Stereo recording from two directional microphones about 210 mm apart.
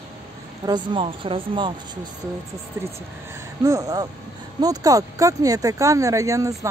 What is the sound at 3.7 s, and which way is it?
Speech, 15° right (ahead or behind).